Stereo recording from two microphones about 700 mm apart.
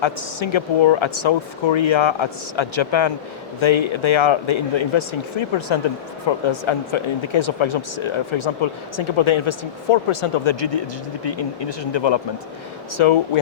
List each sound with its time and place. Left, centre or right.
0.0 s speech: left
11.2 s speech: left